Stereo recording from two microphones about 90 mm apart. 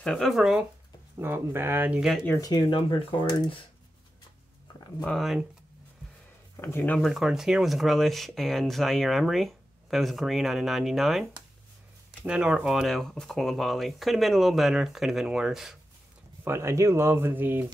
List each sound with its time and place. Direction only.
0.0 s speech: 5° left (ahead or behind)
1.1 s speech: 25° right (ahead or behind)
1.9 s speech: 5° right (ahead or behind)
2.7 s speech: 70° left (ahead or behind)
5.0 s speech: centre (ahead or behind)
6.5 s speech: 25° left (ahead or behind)
7.0 s speech: centre (ahead or behind)
12.3 s speech: 10° right (ahead or behind)
16.4 s speech: 30° right (ahead or behind)